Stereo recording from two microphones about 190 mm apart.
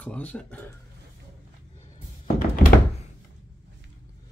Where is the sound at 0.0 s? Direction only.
5° left (ahead or behind).